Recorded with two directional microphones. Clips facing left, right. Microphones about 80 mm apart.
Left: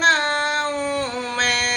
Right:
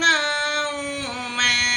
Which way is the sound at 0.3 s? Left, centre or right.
Left.